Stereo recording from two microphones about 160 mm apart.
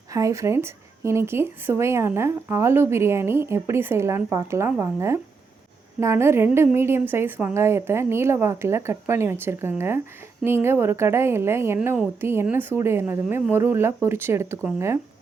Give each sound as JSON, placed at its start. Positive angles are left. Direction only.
{"t": 0.1, "sound": "speech", "side_deg": -20}